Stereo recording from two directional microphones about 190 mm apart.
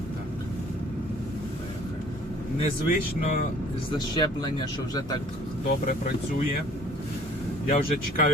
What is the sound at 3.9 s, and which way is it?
Speech, 20° left (ahead or behind).